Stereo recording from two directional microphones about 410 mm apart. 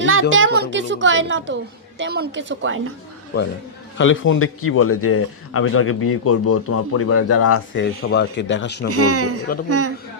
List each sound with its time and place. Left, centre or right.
0.0 s speech: right
3.9 s a man's voice: left
8.9 s speech: right